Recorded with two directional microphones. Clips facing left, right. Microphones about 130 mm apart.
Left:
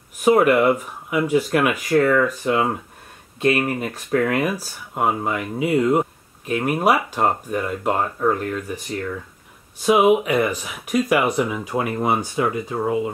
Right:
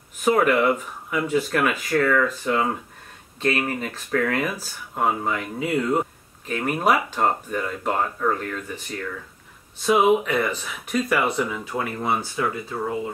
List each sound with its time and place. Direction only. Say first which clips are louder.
0.4 s speech: left 3 dB; 15° left (ahead or behind)
9.8 s speech: left 3 dB; 15° left (ahead or behind)